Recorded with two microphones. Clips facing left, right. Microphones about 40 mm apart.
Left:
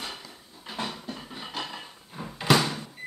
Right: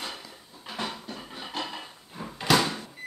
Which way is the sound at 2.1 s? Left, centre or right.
Centre.